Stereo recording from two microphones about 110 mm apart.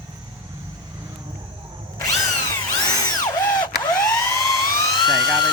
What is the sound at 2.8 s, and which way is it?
Music, 35° left (ahead or behind).